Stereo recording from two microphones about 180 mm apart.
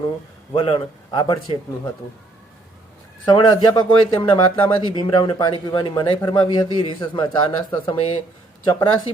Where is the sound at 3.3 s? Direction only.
25° left (ahead or behind).